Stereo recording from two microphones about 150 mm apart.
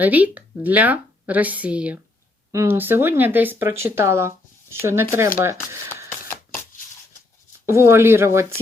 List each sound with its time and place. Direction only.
0.0 s speech: 10° right (ahead or behind)
6.1 s a sound: 15° left (ahead or behind)
7.7 s speech: 20° right (ahead or behind)